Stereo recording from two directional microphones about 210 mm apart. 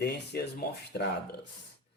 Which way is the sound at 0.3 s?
45° left (ahead or behind).